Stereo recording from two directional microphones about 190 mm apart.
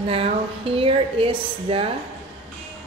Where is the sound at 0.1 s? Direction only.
30° right (ahead or behind).